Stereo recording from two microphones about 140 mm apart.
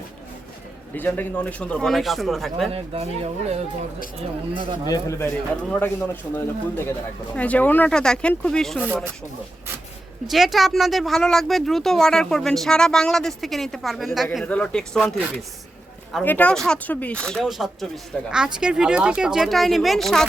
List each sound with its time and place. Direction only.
0.9 s speech: 10° left (ahead or behind)
2.6 s speech: 45° right (ahead or behind)
4.9 s speech: 20° left (ahead or behind)
5.3 s speech: 10° left (ahead or behind)
10.2 s speech: centre (ahead or behind)
16.2 s speech: 10° left (ahead or behind)